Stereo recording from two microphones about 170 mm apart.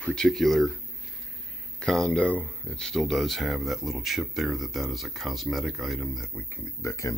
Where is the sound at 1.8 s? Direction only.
5° left (ahead or behind).